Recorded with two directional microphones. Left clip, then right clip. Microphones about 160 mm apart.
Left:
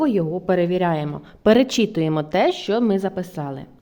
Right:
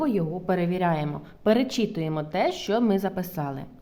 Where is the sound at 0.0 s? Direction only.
30° left (ahead or behind).